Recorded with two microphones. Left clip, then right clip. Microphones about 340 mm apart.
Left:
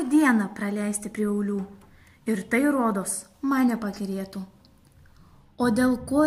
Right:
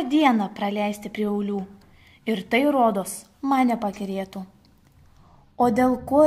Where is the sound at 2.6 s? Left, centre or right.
Centre.